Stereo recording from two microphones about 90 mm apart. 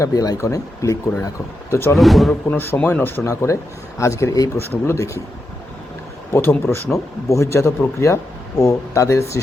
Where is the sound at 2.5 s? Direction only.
20° left (ahead or behind).